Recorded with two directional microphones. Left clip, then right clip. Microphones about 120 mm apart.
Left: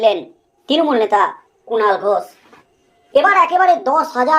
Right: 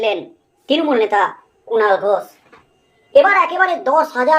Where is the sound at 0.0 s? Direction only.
30° left (ahead or behind).